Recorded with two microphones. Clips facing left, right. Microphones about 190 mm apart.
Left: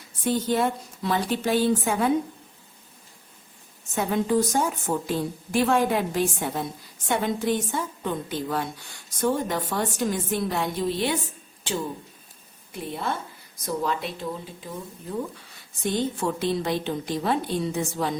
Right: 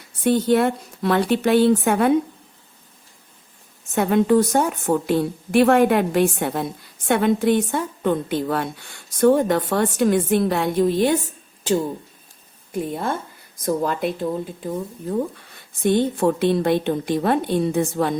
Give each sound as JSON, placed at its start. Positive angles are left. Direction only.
{"t": 0.3, "sound": "a woman's voice", "side_deg": -65}
{"t": 3.9, "sound": "a woman's voice", "side_deg": -65}